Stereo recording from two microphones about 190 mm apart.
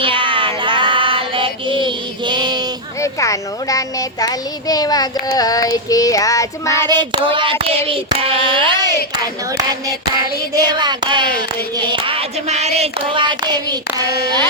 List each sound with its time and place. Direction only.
0.0 s child singing: 25° right (ahead or behind)
3.0 s a child's voice: 15° left (ahead or behind)
6.8 s a sound: 20° right (ahead or behind)